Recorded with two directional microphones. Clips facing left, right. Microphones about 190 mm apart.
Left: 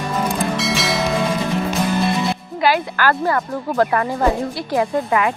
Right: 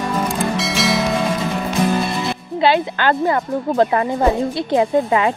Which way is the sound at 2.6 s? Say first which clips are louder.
Right 2 dB; 25° right (ahead or behind).